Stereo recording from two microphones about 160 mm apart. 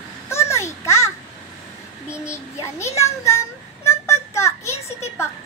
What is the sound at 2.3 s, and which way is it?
A child's voice, 20° left (ahead or behind).